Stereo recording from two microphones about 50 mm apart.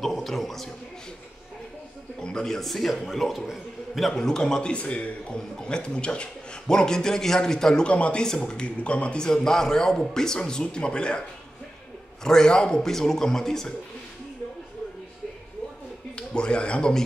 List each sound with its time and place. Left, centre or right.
0.0 s a man's voice: centre
2.1 s a man's voice: centre
4.1 s a man's voice: centre
7.9 s a man's voice: left; by 13.7 s centre
16.2 s speech: left